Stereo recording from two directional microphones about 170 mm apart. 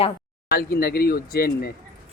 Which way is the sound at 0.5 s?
65° left (ahead or behind).